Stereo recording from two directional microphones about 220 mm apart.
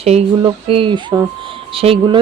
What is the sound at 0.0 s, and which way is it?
Speech, 25° right (ahead or behind).